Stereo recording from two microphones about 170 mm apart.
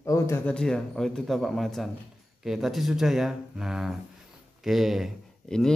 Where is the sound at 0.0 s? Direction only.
15° left (ahead or behind).